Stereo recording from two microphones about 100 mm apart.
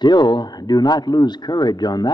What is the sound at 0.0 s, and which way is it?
A man's voice, 45° left (ahead or behind).